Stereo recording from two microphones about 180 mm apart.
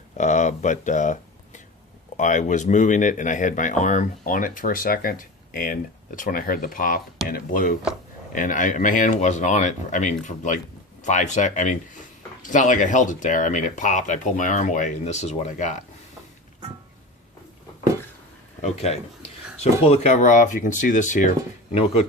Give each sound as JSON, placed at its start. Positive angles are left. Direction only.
{"t": 0.2, "sound": "speech", "side_deg": 40}
{"t": 18.6, "sound": "speech", "side_deg": 35}